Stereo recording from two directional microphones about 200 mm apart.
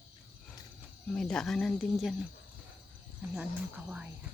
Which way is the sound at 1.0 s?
5° left (ahead or behind).